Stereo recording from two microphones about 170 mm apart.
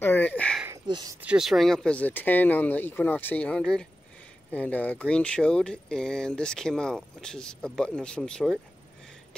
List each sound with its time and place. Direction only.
0.0 s a sound: 10° left (ahead or behind)
0.8 s speech: 25° right (ahead or behind)
1.2 s speech: 5° right (ahead or behind)